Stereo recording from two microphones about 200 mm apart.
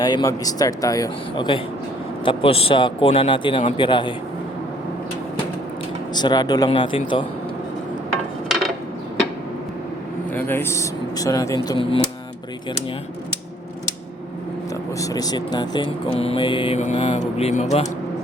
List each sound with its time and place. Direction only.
0.0 s speech: 20° left (ahead or behind)
6.1 s speech: 20° left (ahead or behind)
8.4 s a sound: centre (ahead or behind)
10.3 s speech: 10° left (ahead or behind); by 12.0 s 25° left (ahead or behind)
14.9 s speech: 20° left (ahead or behind); by 17.8 s 35° left (ahead or behind)